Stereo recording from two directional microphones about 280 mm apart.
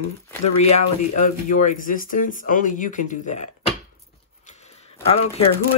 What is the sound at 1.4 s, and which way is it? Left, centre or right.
Speech, left.